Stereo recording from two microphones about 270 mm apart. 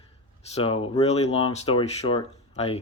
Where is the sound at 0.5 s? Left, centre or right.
Centre.